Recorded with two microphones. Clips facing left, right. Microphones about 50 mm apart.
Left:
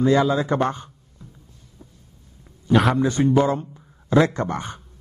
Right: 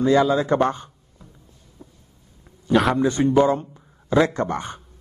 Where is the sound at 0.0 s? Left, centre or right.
Left.